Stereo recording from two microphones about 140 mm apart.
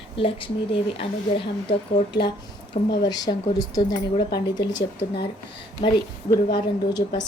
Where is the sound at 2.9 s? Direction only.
30° left (ahead or behind).